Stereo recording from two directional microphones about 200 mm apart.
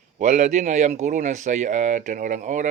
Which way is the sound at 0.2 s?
40° right (ahead or behind).